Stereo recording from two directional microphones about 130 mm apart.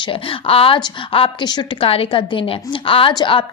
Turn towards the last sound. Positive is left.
turn(degrees=40)  # may be behind; listen again after turning